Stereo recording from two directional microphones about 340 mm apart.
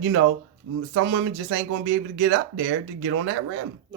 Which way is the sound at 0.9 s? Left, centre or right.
Right.